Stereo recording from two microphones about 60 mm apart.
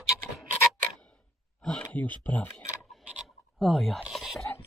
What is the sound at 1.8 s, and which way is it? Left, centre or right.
Speech, left.